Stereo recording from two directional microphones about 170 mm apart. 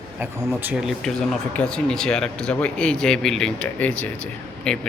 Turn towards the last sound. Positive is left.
turn(degrees=5)  # may be behind; listen again after turning